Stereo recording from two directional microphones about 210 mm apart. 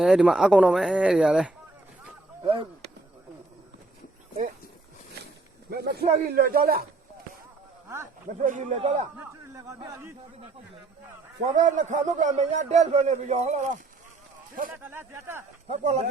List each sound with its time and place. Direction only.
0.0 s speech: centre (ahead or behind)
2.4 s speech: 25° right (ahead or behind)
5.7 s a man's voice: 50° right (ahead or behind)
8.4 s a man's voice: 35° right (ahead or behind)
9.1 s a man's voice: 15° right (ahead or behind)
11.5 s a man's voice: 35° right (ahead or behind)
14.8 s a man's voice: 10° right (ahead or behind)
15.6 s a man's voice: 30° right (ahead or behind)